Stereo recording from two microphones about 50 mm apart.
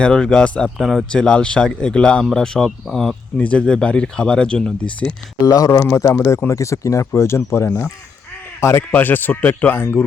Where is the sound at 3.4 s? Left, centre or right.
Left.